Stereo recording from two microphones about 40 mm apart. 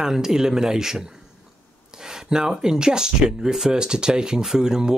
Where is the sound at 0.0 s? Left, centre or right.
Centre.